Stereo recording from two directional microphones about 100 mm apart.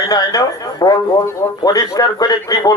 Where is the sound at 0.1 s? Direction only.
40° left (ahead or behind).